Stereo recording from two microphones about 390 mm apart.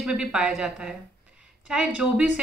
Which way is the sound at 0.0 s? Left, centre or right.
Centre.